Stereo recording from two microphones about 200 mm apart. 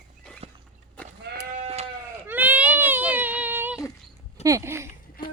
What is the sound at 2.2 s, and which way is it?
Baby cry, 10° right (ahead or behind).